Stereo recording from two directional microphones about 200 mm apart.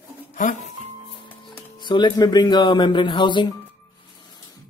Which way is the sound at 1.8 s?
20° left (ahead or behind).